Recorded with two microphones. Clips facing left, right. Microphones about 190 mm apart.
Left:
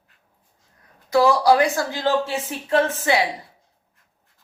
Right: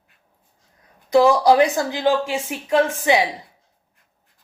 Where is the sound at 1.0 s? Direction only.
20° right (ahead or behind).